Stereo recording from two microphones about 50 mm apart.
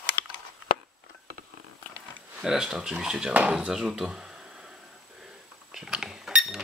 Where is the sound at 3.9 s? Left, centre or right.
Centre.